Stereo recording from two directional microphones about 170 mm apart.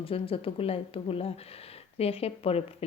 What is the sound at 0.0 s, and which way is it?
A woman's voice, 35° left (ahead or behind).